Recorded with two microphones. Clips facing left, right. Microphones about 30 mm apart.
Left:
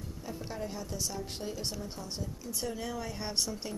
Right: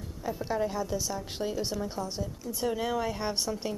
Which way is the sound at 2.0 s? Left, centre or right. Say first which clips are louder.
Right 5 dB; centre.